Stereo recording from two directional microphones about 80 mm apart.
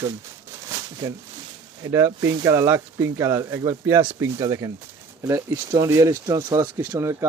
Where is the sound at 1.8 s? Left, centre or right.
Right.